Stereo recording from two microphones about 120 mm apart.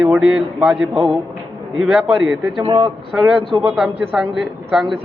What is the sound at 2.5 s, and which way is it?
Speech, 50° right (ahead or behind).